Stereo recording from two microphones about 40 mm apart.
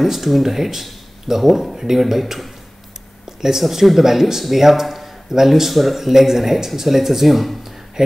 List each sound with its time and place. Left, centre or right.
0.0 s speech: centre